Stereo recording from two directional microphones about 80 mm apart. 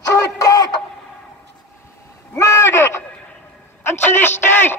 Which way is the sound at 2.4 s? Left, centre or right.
Left.